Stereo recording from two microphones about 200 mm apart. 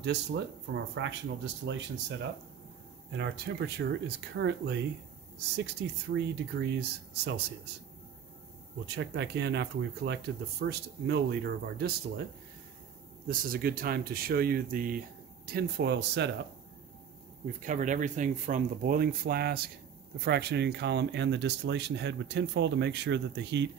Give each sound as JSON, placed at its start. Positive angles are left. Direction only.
{"t": 0.0, "sound": "speech", "side_deg": -60}
{"t": 8.8, "sound": "speech", "side_deg": -60}
{"t": 13.3, "sound": "speech", "side_deg": -45}
{"t": 17.5, "sound": "speech", "side_deg": -40}